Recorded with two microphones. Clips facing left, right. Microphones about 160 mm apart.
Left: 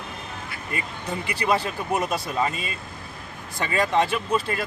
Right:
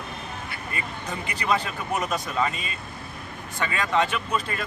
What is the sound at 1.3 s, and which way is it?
Speech, 30° left (ahead or behind).